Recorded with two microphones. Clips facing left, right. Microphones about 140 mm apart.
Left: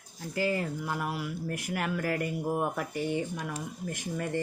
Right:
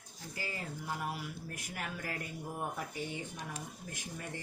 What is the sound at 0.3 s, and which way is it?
Speech, 90° left.